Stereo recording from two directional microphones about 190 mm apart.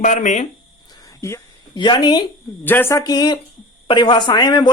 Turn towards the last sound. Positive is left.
turn(degrees=20)  # may be behind; listen again after turning